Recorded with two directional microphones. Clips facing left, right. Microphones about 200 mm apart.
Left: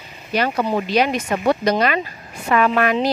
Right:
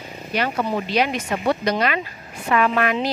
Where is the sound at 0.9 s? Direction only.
45° left (ahead or behind).